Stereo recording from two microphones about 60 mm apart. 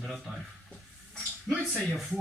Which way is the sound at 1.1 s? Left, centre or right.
Centre.